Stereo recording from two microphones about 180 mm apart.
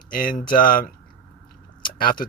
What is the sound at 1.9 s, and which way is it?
Speech, 50° left (ahead or behind).